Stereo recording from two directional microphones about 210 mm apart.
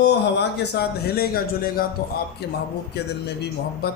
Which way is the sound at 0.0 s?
50° left (ahead or behind).